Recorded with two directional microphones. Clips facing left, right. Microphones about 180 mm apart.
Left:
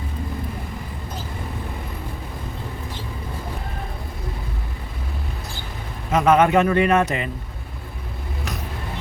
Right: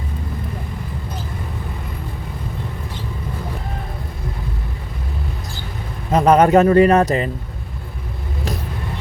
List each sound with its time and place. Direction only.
6.1 s speech: 35° right (ahead or behind)